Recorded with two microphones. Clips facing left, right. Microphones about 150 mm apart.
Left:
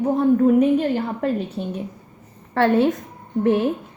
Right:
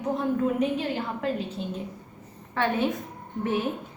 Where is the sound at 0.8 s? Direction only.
50° left (ahead or behind).